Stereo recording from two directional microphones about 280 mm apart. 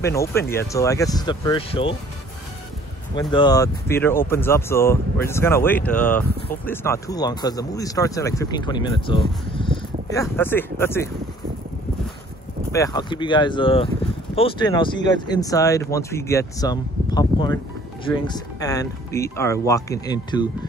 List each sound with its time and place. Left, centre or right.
0.0 s speech: centre
3.2 s speech: centre
12.7 s speech: centre